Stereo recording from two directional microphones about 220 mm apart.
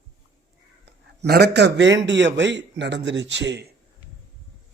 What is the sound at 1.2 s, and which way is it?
A man's voice, 45° right (ahead or behind).